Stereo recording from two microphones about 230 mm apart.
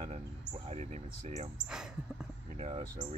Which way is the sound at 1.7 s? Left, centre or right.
Centre.